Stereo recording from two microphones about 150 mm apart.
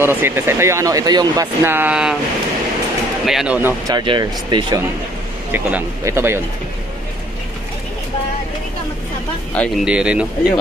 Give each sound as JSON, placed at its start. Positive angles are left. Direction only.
{"t": 0.0, "sound": "speech", "side_deg": -15}
{"t": 3.3, "sound": "speech", "side_deg": -5}
{"t": 3.8, "sound": "speech", "side_deg": -30}
{"t": 5.5, "sound": "speech", "side_deg": -10}
{"t": 9.8, "sound": "speech", "side_deg": -5}